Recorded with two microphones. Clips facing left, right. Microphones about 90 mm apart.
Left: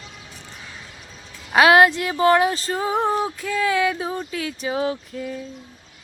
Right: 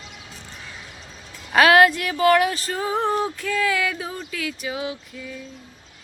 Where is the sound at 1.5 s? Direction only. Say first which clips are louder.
Left 1 dB; 20° left (ahead or behind); by 5.4 s 40° left (ahead or behind).